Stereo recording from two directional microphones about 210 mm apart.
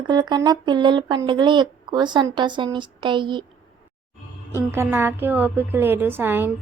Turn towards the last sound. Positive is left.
turn(degrees=-10)  # may be behind; listen again after turning